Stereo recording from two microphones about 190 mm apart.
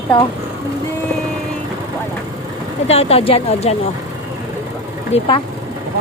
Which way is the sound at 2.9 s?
30° left (ahead or behind).